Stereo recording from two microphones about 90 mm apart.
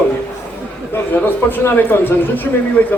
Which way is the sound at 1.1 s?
20° left (ahead or behind).